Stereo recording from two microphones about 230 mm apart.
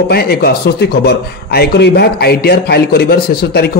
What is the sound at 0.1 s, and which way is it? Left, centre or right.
Speech, left.